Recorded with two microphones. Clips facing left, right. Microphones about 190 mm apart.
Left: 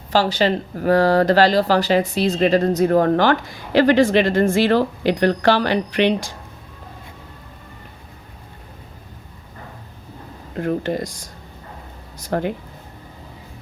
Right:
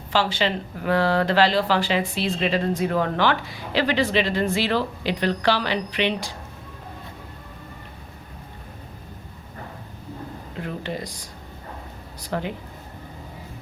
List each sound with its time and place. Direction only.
0.1 s speech: 40° left (ahead or behind)
10.6 s speech: 45° left (ahead or behind)